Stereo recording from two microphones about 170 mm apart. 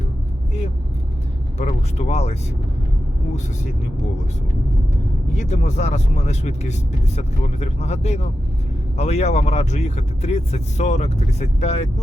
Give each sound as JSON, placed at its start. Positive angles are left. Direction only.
{"t": 1.5, "sound": "speech", "side_deg": 40}
{"t": 5.4, "sound": "speech", "side_deg": 45}